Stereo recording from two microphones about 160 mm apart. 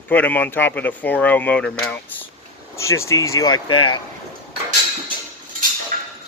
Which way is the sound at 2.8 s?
20° left (ahead or behind).